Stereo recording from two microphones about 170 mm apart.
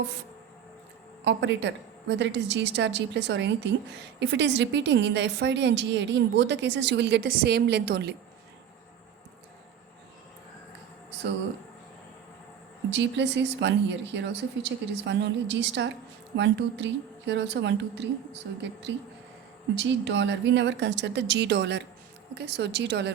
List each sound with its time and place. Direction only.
1.2 s a woman's voice: 90° right
12.9 s a woman's voice: 90° right